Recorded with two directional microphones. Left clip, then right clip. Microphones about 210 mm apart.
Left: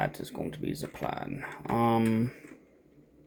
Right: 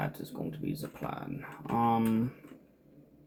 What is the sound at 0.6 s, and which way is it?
Speech, 50° left (ahead or behind).